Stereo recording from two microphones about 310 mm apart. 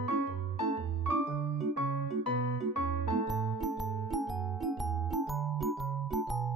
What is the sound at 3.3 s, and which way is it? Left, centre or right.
Music, centre.